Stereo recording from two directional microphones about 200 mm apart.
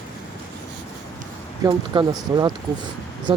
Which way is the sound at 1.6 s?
20° right (ahead or behind).